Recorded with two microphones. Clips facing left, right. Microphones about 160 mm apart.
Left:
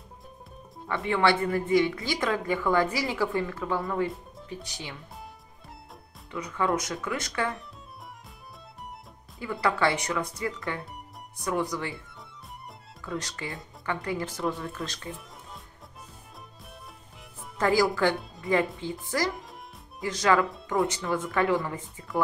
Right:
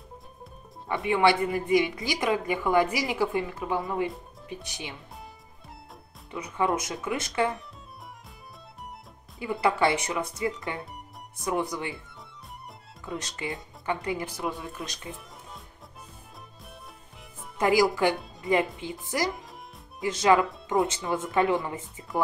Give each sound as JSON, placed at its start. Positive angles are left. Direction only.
{"t": 0.8, "sound": "a woman's voice", "side_deg": -15}
{"t": 6.3, "sound": "speech", "side_deg": -20}
{"t": 9.4, "sound": "speech", "side_deg": -20}
{"t": 13.0, "sound": "a woman's voice", "side_deg": -20}
{"t": 14.8, "sound": "speech", "side_deg": 0}
{"t": 17.6, "sound": "a woman's voice", "side_deg": -20}